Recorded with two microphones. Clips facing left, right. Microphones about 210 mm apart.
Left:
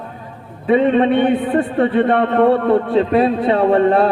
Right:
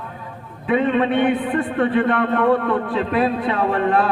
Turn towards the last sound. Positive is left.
turn(degrees=30)  # may be behind; listen again after turning